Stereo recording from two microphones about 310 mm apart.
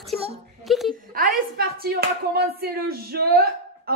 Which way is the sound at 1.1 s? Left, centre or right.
Right.